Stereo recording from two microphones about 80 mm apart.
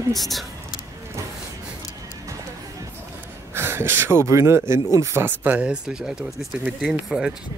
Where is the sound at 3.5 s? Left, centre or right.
Right.